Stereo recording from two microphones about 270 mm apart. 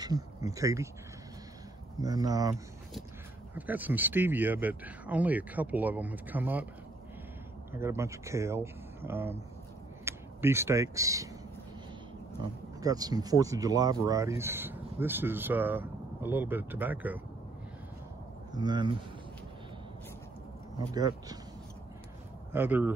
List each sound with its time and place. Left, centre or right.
0.0 s speech: centre
2.0 s speech: centre
3.5 s speech: centre
7.7 s speech: centre
12.8 s speech: centre
18.5 s speech: centre
20.7 s speech: centre
22.5 s speech: centre